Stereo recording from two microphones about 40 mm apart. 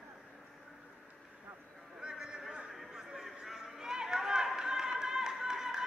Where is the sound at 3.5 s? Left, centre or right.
Centre.